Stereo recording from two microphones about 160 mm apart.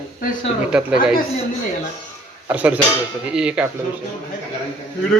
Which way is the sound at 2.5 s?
10° right (ahead or behind).